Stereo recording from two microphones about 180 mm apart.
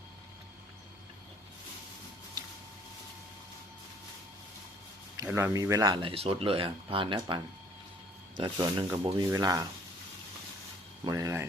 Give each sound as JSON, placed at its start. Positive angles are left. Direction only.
{"t": 5.2, "sound": "speech", "side_deg": -15}
{"t": 8.4, "sound": "speech", "side_deg": -25}
{"t": 11.0, "sound": "speech", "side_deg": -20}